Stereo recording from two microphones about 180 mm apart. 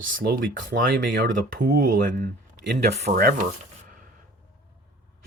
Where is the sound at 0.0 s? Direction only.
55° right (ahead or behind).